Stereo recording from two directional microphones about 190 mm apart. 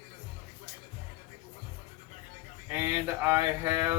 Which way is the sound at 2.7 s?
10° right (ahead or behind).